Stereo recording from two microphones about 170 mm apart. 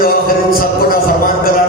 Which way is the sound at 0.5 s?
60° left (ahead or behind).